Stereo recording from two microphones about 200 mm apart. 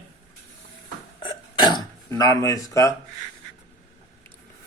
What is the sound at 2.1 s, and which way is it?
Speech, 15° left (ahead or behind).